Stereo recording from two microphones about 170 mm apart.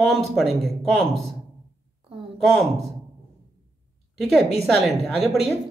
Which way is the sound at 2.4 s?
Centre (ahead or behind).